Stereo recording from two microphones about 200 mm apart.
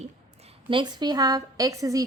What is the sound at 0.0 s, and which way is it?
A woman's voice, 30° right (ahead or behind).